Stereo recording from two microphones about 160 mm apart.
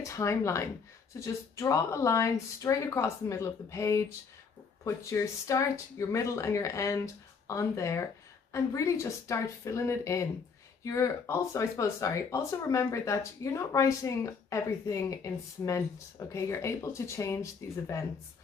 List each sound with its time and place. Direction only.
0.0 s speech: 20° left (ahead or behind)